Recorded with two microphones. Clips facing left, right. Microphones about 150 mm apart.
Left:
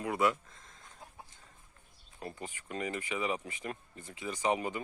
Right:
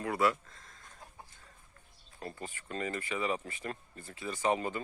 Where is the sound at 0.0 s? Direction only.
20° left (ahead or behind).